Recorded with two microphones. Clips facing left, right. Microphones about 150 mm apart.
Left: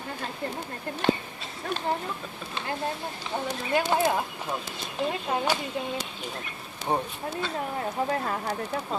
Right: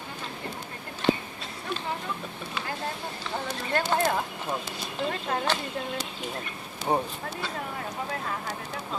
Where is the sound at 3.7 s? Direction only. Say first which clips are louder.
Left 2 dB; 10° left (ahead or behind).